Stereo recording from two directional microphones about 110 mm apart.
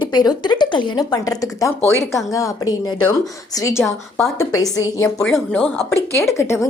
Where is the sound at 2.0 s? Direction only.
Centre (ahead or behind).